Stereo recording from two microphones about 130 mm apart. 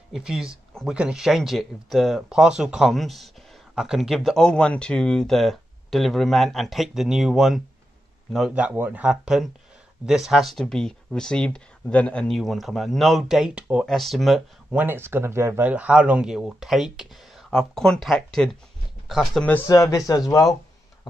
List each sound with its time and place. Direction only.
0.1 s speech: 5° right (ahead or behind)
14.8 s speech: 15° right (ahead or behind)
19.7 s speech: 25° left (ahead or behind)